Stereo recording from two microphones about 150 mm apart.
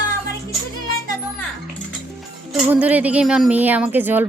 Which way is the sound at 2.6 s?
10° right (ahead or behind).